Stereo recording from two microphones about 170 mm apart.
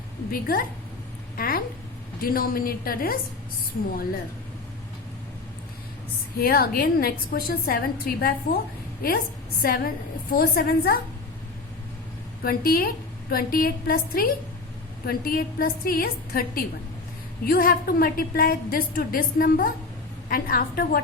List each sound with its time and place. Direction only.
0.3 s a woman's voice: 60° left (ahead or behind)
1.4 s a sound: 60° left (ahead or behind)
2.2 s a woman's voice: 60° left (ahead or behind)
6.4 s a woman's voice: 60° left (ahead or behind)
12.4 s a woman's voice: 60° left (ahead or behind)